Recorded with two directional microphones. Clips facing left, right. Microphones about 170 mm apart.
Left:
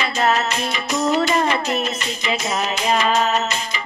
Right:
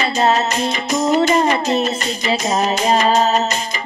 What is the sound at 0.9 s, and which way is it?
Music, 20° right (ahead or behind).